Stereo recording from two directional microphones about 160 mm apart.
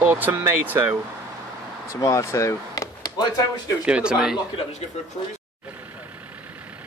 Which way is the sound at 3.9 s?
5° right (ahead or behind).